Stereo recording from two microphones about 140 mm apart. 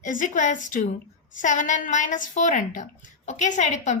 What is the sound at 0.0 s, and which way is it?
A woman's voice, 65° left (ahead or behind).